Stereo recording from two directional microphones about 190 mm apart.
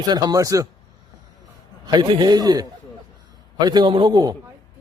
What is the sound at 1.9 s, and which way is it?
Speech, 20° right (ahead or behind).